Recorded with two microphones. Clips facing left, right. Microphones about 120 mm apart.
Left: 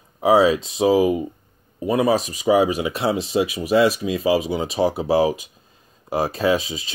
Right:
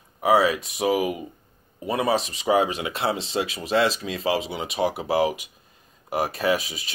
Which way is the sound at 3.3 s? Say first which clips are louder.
Left 6 dB; 15° left (ahead or behind).